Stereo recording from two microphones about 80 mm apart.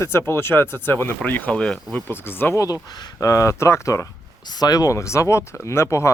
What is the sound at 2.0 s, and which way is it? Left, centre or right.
Speech, left.